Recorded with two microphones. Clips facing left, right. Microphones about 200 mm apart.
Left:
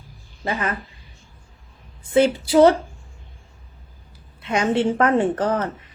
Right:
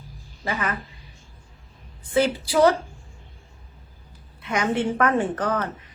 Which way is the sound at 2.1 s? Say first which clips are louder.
Left 5 dB; 25° left (ahead or behind).